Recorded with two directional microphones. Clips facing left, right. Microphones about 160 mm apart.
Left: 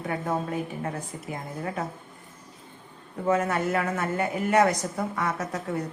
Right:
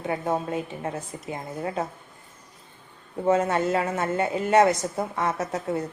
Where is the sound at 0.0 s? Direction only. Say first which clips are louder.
Right 2 dB; 25° right (ahead or behind).